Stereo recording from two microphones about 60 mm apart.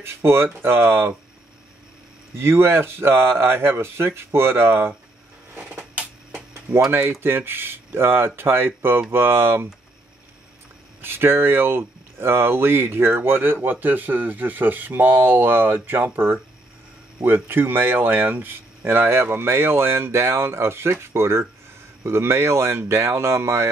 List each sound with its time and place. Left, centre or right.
0.0 s speech: right
2.3 s speech: right
5.6 s a sound: right
6.9 s speech: right
11.0 s speech: right